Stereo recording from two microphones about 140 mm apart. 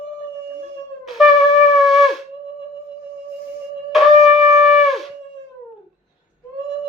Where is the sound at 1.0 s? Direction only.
Centre (ahead or behind).